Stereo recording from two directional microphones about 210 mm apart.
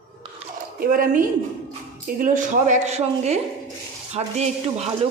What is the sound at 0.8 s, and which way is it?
Speech, 40° right (ahead or behind).